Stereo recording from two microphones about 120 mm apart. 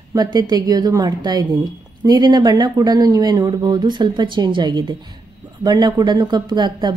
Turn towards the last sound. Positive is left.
turn(degrees=-40)  # may be behind; listen again after turning